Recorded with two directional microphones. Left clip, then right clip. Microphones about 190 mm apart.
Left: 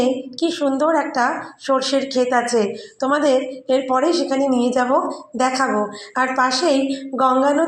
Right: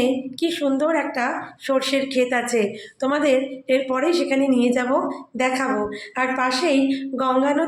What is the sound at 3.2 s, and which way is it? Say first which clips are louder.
A woman's voice: left 2 dB; 5° left (ahead or behind).